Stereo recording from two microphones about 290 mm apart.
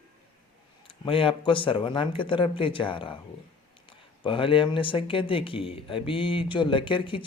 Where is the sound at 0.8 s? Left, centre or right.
Centre.